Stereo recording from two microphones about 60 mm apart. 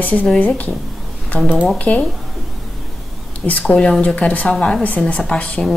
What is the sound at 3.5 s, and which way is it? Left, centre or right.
A woman's voice, left.